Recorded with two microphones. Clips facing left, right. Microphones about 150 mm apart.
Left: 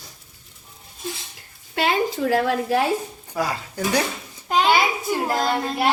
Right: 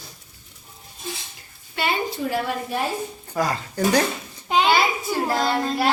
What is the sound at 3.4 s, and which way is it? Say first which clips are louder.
Speech: right 1 dB; 10° left (ahead or behind).